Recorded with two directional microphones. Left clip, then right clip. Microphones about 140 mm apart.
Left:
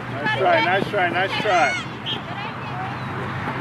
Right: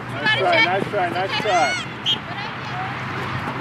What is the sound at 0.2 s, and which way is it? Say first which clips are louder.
Speech: right 2 dB; 35° right (ahead or behind).